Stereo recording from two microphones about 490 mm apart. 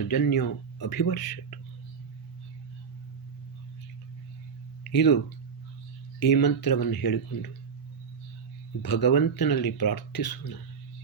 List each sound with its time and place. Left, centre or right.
0.1 s speech: left
4.9 s speech: left
6.1 s speech: left
8.8 s speech: left